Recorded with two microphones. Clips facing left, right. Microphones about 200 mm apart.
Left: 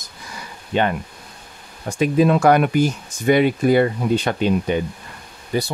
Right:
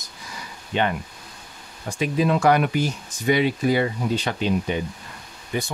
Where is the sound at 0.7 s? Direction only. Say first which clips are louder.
Left 4 dB; 45° left (ahead or behind).